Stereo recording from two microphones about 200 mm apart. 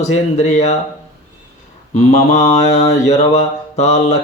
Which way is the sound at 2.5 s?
35° left (ahead or behind).